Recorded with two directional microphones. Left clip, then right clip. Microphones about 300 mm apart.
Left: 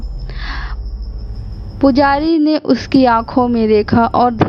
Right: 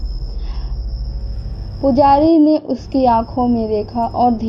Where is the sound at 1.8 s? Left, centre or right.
Left.